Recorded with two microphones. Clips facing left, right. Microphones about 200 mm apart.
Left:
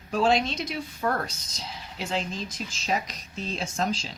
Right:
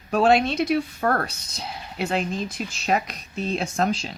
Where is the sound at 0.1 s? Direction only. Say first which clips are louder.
Right 5 dB; 60° right (ahead or behind).